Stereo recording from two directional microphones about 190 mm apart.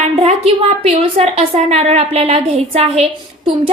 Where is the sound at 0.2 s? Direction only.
35° right (ahead or behind).